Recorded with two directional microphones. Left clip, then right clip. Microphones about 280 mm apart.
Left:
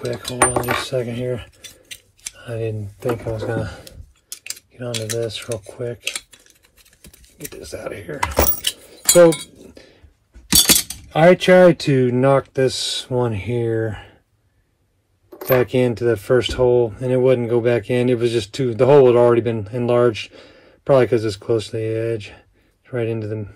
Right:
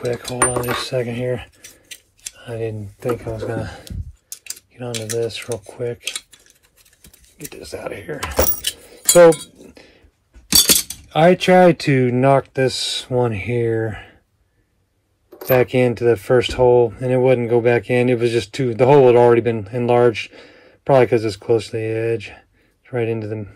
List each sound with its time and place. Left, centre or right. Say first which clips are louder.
0.2 s speech: left 1 dB; centre
1.0 s speech: right 2 dB; centre
1.4 s scissors: even; centre
3.3 s speech: left 1 dB; centre
3.8 s a sound: right 3 dB; centre
4.9 s speech: right 2 dB; centre
5.7 s cutlery: right 1 dB; centre
7.0 s speech: left 1 dB; centre
8.8 s chink: right 2 dB; centre
10.5 s a sound: even; centre
11.1 s speech: left 1 dB; centre
15.4 s speech: right 1 dB; centre